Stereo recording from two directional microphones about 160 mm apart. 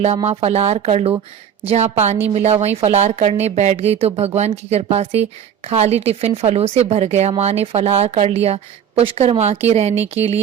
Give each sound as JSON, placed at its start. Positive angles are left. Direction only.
{"t": 0.3, "sound": "speech", "side_deg": -40}